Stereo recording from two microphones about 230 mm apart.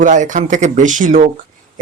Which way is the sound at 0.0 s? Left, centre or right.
Right.